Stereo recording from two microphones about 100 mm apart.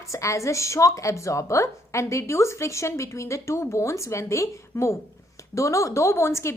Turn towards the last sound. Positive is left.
turn(degrees=25)  # may be behind; listen again after turning